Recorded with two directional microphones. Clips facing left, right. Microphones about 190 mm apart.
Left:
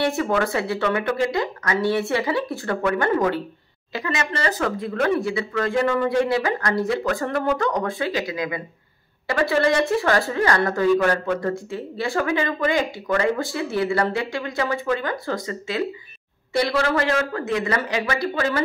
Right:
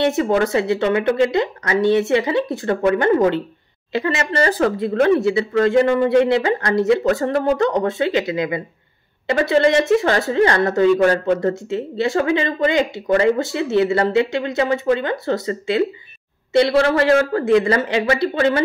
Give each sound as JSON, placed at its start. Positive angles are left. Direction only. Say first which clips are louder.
{"t": 0.0, "sound": "a woman's voice", "louder": "right 4 dB", "side_deg": -20}